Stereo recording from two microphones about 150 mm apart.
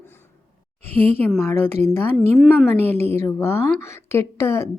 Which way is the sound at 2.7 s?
15° left (ahead or behind).